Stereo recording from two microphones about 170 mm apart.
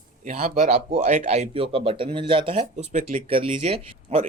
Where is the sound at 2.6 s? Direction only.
45° right (ahead or behind).